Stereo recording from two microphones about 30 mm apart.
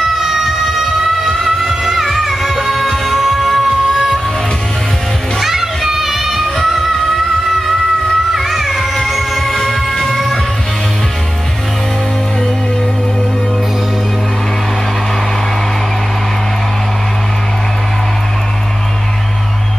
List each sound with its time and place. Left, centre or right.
0.1 s music: centre
5.4 s music: centre
8.4 s music: centre